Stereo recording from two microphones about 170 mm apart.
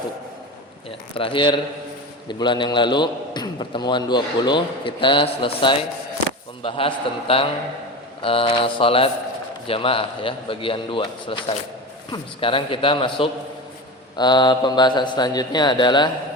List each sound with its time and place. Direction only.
0.9 s a man's voice: 30° left (ahead or behind)